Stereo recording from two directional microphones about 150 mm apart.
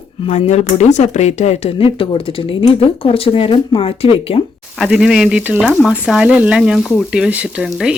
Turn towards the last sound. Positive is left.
turn(degrees=-10)  # may be behind; listen again after turning